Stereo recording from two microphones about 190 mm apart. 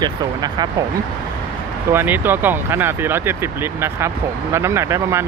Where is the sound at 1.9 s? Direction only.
10° right (ahead or behind).